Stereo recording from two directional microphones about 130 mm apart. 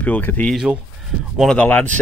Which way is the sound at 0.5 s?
5° right (ahead or behind).